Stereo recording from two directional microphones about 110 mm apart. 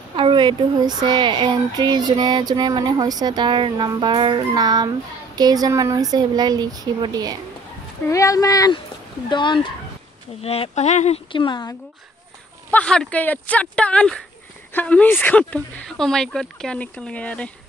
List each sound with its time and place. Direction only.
0.1 s speech: 45° right (ahead or behind)
8.1 s speech: 30° left (ahead or behind)
9.3 s speech: 45° left (ahead or behind)
10.4 s speech: 65° left (ahead or behind); by 11.1 s 85° left
11.3 s speech: 45° left (ahead or behind)
12.7 s speech: 5° left (ahead or behind)